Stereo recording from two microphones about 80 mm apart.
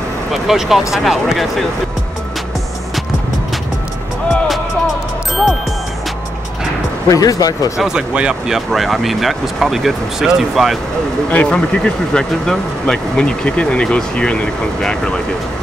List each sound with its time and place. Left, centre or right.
0.3 s speech: centre
7.1 s speech: left
7.7 s speech: centre
11.2 s speech: centre